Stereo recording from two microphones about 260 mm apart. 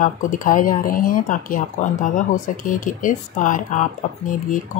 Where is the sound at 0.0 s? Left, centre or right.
Left.